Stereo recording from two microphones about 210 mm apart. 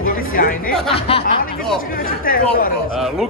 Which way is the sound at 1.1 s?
25° left (ahead or behind).